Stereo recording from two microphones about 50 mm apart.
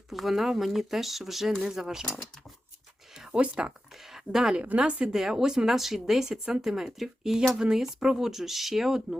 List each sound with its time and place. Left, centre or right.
0.1 s speech: centre
3.3 s speech: right
4.1 s speech: centre
5.1 s speech: centre